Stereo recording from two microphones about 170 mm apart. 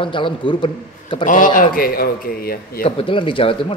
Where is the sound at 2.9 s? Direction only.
30° left (ahead or behind).